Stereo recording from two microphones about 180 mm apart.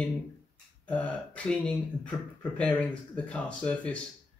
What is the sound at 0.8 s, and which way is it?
Speech, 10° left (ahead or behind).